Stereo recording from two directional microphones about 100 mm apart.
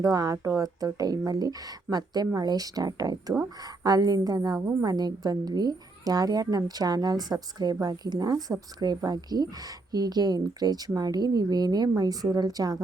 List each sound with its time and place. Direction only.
0.0 s a woman's voice: 40° right (ahead or behind)